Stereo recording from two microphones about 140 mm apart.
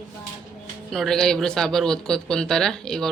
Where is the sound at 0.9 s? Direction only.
Centre (ahead or behind).